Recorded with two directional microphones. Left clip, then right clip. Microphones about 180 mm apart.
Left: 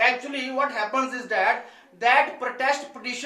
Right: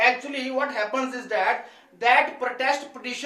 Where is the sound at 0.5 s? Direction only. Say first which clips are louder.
Left 1 dB; 20° right (ahead or behind).